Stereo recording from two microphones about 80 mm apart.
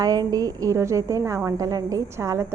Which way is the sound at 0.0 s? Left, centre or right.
Right.